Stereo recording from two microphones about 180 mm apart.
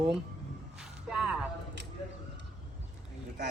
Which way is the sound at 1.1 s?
5° right (ahead or behind).